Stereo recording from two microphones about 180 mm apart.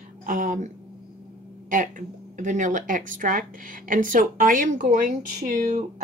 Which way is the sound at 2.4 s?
45° right (ahead or behind).